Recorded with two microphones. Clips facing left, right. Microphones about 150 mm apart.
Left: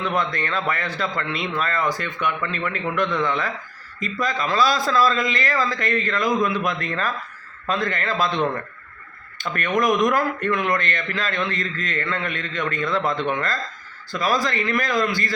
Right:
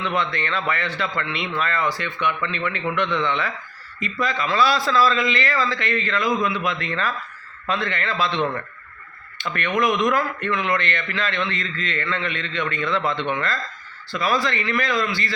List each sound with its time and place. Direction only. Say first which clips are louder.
0.0 s a man's voice: left 1 dB; 40° left (ahead or behind)